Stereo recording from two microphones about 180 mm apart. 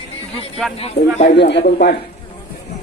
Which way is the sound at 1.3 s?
70° left (ahead or behind).